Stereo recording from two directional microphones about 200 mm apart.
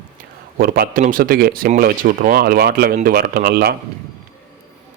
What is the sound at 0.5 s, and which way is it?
Speech, 45° right (ahead or behind).